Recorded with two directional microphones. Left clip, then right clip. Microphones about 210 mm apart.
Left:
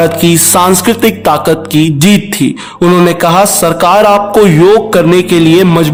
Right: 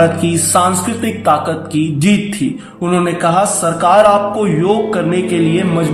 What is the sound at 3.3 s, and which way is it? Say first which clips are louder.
Speech: left 6 dB; 55° left (ahead or behind).